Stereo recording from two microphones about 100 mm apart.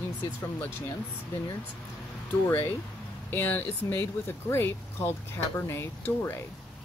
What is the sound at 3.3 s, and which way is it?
Speech, 20° left (ahead or behind).